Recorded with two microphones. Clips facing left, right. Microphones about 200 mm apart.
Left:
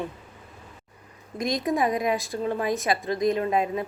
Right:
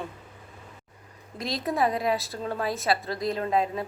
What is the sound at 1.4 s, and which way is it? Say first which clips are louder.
A woman's voice: left 2 dB; 15° left (ahead or behind).